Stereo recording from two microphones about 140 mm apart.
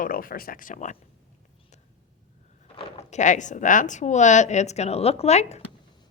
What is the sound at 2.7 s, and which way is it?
Speech, 45° left (ahead or behind).